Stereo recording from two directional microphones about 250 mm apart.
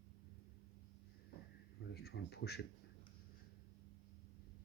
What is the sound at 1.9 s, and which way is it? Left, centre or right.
Speech, left.